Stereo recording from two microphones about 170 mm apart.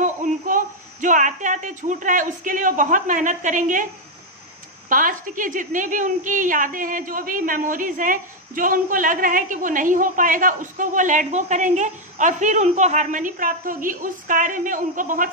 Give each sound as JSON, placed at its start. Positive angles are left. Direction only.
{"t": 0.0, "sound": "speech", "side_deg": -50}
{"t": 4.8, "sound": "a woman's voice", "side_deg": -55}